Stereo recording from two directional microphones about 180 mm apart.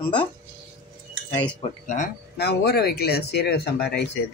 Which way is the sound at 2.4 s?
65° left (ahead or behind).